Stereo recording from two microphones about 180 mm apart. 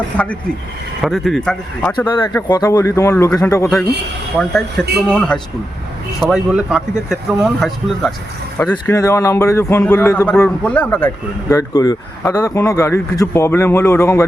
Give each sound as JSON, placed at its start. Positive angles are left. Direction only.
{"t": 0.1, "sound": "speech", "side_deg": 10}
{"t": 2.0, "sound": "speech", "side_deg": 20}
{"t": 4.4, "sound": "speech", "side_deg": 5}
{"t": 8.5, "sound": "speech", "side_deg": 10}